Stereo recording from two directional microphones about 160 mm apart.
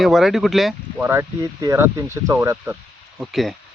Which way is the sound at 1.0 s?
15° right (ahead or behind).